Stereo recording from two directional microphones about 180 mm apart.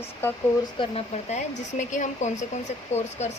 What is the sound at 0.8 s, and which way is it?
A woman's voice, 35° left (ahead or behind).